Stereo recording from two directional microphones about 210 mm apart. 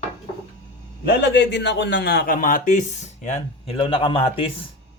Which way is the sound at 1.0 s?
55° left (ahead or behind).